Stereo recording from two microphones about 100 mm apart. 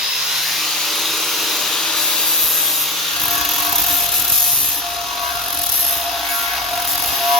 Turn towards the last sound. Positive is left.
turn(degrees=0)  # may be behind; listen again after turning